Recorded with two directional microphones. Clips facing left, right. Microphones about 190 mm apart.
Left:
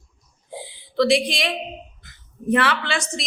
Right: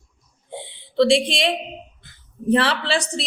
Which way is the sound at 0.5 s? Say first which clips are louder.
Right 2 dB; 25° right (ahead or behind).